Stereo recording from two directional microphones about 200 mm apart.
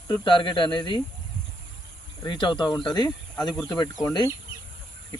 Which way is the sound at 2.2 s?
25° left (ahead or behind).